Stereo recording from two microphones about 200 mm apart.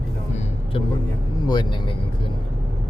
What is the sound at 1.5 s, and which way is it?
Speech, 20° left (ahead or behind).